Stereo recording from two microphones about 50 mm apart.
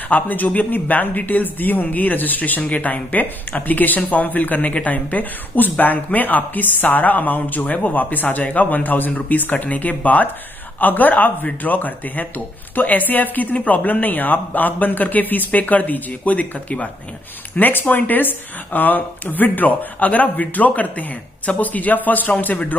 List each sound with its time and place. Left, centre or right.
0.1 s speech: left